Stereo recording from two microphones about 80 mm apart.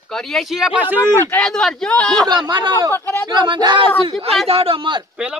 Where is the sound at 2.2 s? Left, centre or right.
Right.